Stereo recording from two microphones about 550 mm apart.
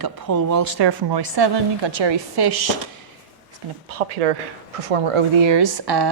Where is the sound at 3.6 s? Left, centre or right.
Right.